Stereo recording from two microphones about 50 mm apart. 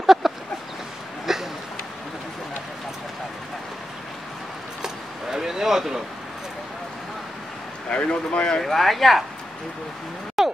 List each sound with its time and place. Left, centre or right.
0.0 s a sound: centre
4.8 s keys jangling: centre
7.9 s speech: left
8.6 s speech: centre
10.4 s music: centre